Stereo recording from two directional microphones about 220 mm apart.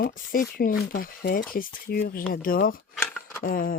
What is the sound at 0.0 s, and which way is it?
Speech, 40° left (ahead or behind).